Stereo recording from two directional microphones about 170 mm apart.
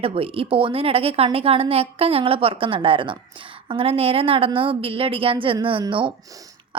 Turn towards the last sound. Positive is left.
turn(degrees=-30)  # may be behind; listen again after turning